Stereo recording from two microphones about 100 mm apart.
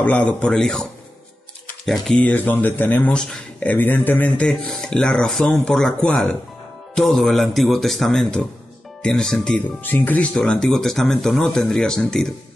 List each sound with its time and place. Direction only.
0.0 s speech: 10° left (ahead or behind)
2.1 s speech: 15° left (ahead or behind)
9.6 s speech: 20° left (ahead or behind)